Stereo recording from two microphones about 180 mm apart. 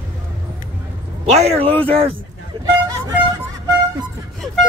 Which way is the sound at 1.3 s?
35° right (ahead or behind).